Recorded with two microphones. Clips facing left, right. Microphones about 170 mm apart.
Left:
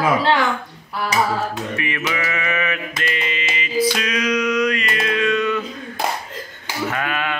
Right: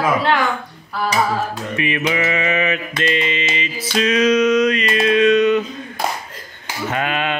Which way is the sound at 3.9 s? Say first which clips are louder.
Right 6 dB; 25° right (ahead or behind).